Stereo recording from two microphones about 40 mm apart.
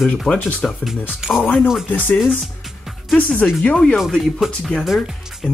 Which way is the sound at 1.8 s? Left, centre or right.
Left.